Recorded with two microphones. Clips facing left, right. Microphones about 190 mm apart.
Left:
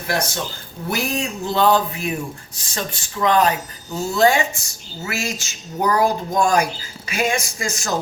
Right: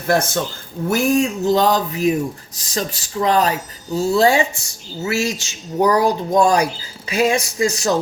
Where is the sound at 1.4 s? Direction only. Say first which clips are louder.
Left 3 dB; 40° right (ahead or behind).